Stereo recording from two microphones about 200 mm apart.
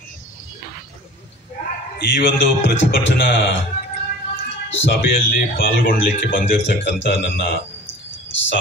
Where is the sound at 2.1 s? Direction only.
60° left (ahead or behind).